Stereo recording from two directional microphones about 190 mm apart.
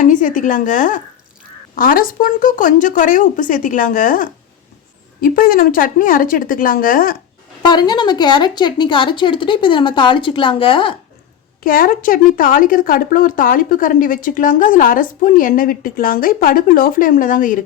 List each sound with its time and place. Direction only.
0.0 s speech: 45° left (ahead or behind)
7.6 s speech: 25° left (ahead or behind)
11.6 s speech: 45° left (ahead or behind)